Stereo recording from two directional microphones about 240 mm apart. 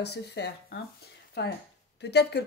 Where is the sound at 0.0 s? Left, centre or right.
Left.